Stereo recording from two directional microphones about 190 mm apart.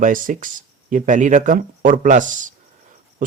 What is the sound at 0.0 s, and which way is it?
Speech, 45° right (ahead or behind).